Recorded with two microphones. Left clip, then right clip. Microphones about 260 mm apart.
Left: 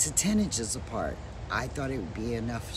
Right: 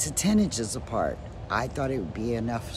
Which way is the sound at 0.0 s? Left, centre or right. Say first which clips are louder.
Right 3 dB; centre.